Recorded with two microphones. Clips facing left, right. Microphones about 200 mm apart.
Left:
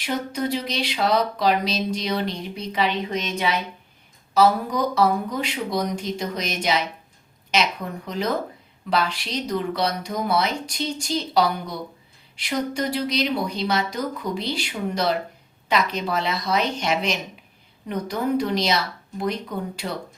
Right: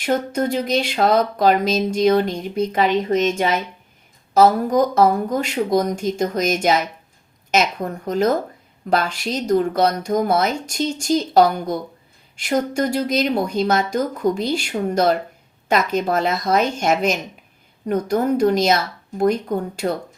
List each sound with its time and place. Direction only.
0.0 s speech: 50° right (ahead or behind)